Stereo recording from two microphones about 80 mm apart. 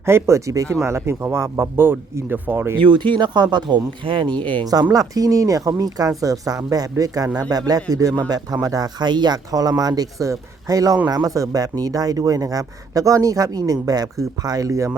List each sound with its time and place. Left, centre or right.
0.0 s speech: right
2.7 s speech: right
4.6 s speech: right